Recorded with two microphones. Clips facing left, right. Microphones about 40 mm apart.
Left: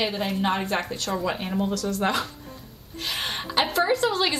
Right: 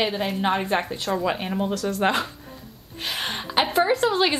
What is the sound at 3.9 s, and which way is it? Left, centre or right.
Speech, right.